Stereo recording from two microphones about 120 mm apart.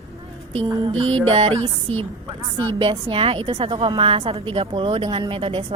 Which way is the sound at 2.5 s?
45° right (ahead or behind).